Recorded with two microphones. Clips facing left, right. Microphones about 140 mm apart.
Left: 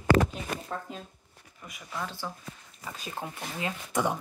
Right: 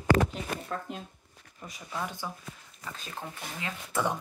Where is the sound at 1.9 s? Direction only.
15° right (ahead or behind).